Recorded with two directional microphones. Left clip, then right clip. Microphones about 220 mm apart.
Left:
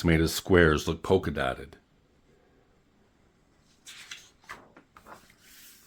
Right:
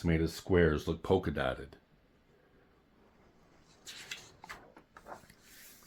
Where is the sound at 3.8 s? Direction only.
5° right (ahead or behind).